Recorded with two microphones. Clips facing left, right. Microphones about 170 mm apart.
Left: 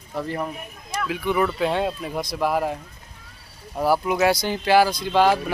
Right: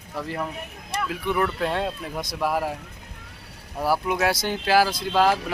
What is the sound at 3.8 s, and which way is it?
Speech, centre (ahead or behind).